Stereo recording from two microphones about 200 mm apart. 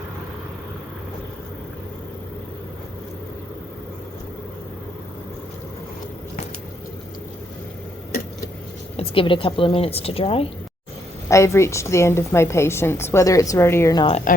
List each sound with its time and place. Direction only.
9.0 s a woman's voice: 25° left (ahead or behind)
11.3 s a woman's voice: 15° left (ahead or behind)